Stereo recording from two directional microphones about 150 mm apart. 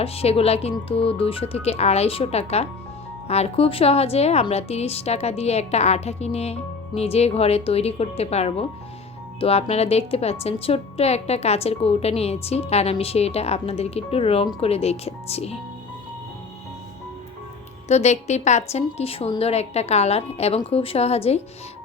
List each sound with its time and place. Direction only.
0.0 s a woman's voice: 40° left (ahead or behind)
17.8 s a woman's voice: 50° left (ahead or behind)